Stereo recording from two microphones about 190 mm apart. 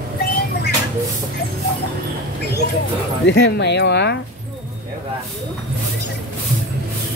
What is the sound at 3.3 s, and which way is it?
Speech, 60° left (ahead or behind).